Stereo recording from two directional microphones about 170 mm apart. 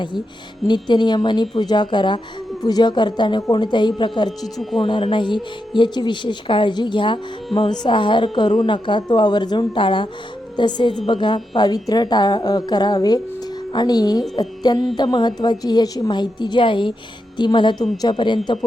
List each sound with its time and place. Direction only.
0.7 s speech: 25° left (ahead or behind)